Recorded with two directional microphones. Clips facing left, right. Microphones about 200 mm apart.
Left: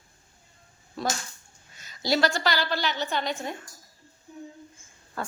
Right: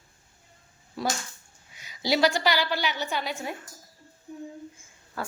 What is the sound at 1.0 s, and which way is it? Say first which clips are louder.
A woman's voice: even; 10° right (ahead or behind).